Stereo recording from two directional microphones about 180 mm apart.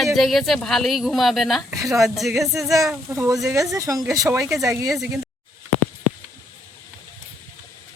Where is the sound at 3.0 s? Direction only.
15° right (ahead or behind).